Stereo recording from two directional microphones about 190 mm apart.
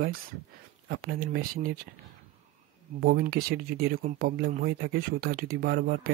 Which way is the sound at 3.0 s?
55° right (ahead or behind).